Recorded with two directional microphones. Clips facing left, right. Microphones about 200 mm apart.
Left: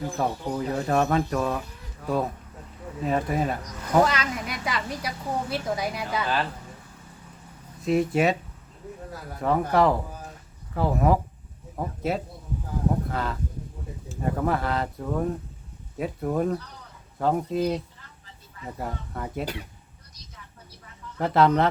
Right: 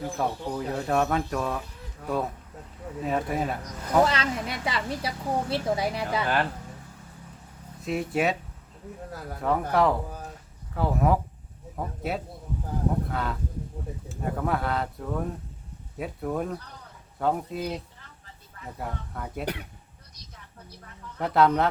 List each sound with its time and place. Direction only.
0.2 s speech: centre (ahead or behind)
3.8 s a woman's voice: 30° right (ahead or behind)
6.2 s speech: 55° right (ahead or behind)
7.8 s speech: centre (ahead or behind)
9.4 s speech: centre (ahead or behind)
18.8 s speech: centre (ahead or behind)
21.2 s speech: centre (ahead or behind)